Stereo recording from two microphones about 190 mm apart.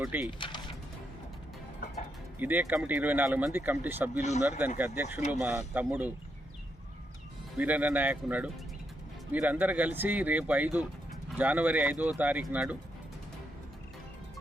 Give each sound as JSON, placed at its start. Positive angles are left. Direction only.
{"t": 0.0, "sound": "speech", "side_deg": -10}
{"t": 0.3, "sound": "speech", "side_deg": 25}
{"t": 2.4, "sound": "speech", "side_deg": -10}
{"t": 7.6, "sound": "speech", "side_deg": -10}